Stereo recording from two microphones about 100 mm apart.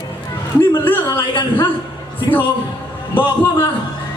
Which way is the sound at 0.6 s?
25° left (ahead or behind).